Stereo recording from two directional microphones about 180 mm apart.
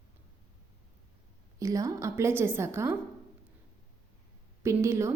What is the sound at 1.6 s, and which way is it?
A woman's voice, 20° right (ahead or behind).